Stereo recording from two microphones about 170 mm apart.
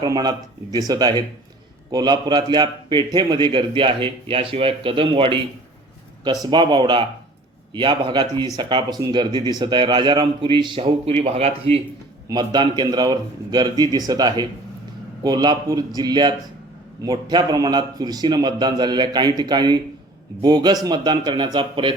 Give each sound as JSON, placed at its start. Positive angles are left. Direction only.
{"t": 0.0, "sound": "a man's voice", "side_deg": -25}
{"t": 12.3, "sound": "a man's voice", "side_deg": -25}